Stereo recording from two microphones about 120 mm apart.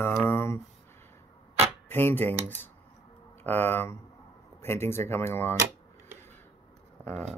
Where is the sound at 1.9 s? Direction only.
20° left (ahead or behind).